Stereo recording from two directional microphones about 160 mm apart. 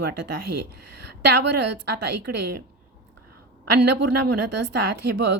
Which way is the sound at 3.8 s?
90° right.